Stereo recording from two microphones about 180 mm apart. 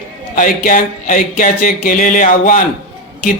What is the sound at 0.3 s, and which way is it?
A man's voice, 50° left (ahead or behind).